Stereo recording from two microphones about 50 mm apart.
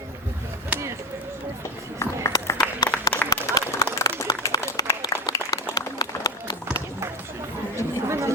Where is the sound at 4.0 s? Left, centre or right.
Left.